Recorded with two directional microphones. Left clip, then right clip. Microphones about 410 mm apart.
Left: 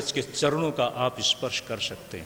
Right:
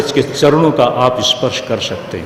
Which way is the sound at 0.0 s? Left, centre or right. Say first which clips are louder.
Right 14 dB; left.